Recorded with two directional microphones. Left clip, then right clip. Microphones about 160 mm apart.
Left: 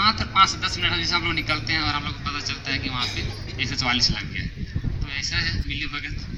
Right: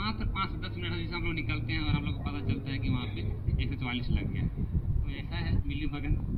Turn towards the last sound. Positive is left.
turn(degrees=40)  # may be behind; listen again after turning